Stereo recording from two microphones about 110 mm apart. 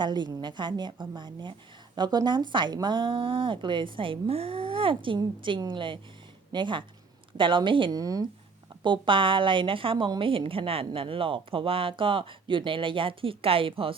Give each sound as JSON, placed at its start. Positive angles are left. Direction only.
{"t": 0.0, "sound": "speech", "side_deg": -40}
{"t": 7.9, "sound": "speech", "side_deg": -35}
{"t": 8.8, "sound": "speech", "side_deg": -50}